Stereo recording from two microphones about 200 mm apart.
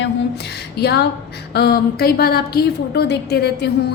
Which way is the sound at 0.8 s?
55° left (ahead or behind).